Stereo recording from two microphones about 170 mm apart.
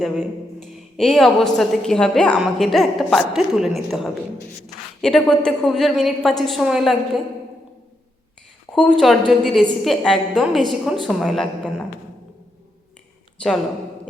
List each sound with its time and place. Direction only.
0.0 s a woman's voice: centre (ahead or behind)
8.7 s a woman's voice: centre (ahead or behind)